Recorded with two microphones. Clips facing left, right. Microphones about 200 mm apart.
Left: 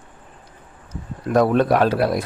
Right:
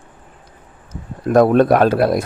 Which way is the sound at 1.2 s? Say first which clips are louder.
Right 5 dB; 50° right (ahead or behind).